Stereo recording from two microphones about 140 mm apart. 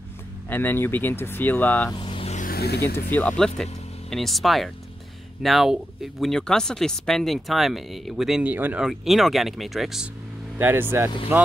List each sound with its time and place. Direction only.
0.5 s speech: 15° left (ahead or behind)
2.0 s vehicle: 40° left (ahead or behind)
2.3 s vehicle: 80° left
3.1 s speech: 10° left (ahead or behind)
10.6 s speech: 15° right (ahead or behind)